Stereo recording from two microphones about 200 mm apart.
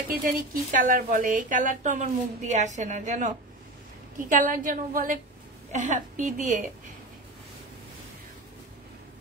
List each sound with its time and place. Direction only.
0.1 s a woman's voice: 45° right (ahead or behind)